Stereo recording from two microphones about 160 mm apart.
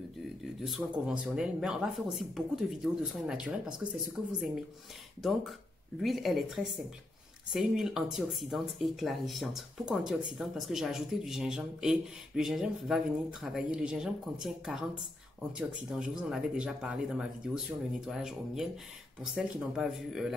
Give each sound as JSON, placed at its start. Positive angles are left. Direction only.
{"t": 0.7, "sound": "speech", "side_deg": 0}
{"t": 5.9, "sound": "speech", "side_deg": 0}